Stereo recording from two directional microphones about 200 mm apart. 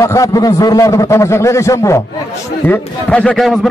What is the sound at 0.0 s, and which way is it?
A man's voice, 15° left (ahead or behind).